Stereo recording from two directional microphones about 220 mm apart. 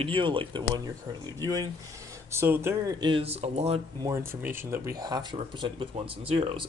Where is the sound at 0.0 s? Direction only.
20° right (ahead or behind).